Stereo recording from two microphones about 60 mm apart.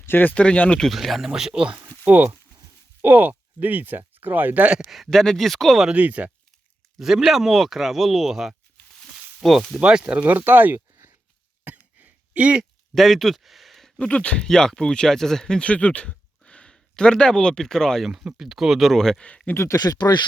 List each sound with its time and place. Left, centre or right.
0.0 s speech: left
0.4 s speech: left
0.8 s speech: centre
2.0 s speech: right
4.9 s speech: centre
5.9 s speech: right
7.0 s speech: centre
9.0 s a sound: centre
9.7 s speech: centre; by 10.8 s right
11.6 s throat clearing: right
12.9 s a sound: centre
14.0 s speech: centre
18.0 s speech: centre
19.5 s speech: left